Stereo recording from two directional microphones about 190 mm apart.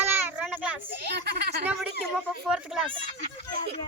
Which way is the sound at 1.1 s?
60° right (ahead or behind).